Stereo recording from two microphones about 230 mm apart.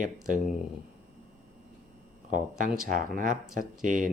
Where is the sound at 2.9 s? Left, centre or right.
Right.